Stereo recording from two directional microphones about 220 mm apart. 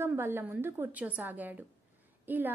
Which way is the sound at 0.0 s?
10° right (ahead or behind).